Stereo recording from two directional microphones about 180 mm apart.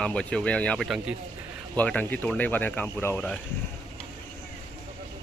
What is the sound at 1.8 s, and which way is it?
Speech, 10° left (ahead or behind).